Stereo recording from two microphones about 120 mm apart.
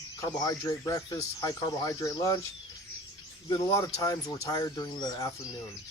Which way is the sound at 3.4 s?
30° left (ahead or behind).